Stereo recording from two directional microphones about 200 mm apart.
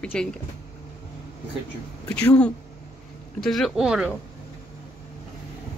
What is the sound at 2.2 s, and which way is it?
Speech, 10° left (ahead or behind).